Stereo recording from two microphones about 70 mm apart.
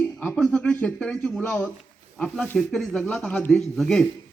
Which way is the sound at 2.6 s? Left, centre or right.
Centre.